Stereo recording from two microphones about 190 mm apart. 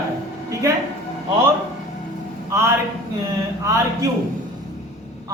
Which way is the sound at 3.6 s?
15° right (ahead or behind).